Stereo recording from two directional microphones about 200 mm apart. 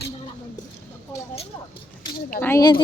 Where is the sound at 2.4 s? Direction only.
15° left (ahead or behind).